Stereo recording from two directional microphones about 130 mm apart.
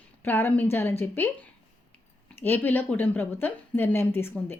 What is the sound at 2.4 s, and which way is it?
A woman's voice, 15° left (ahead or behind).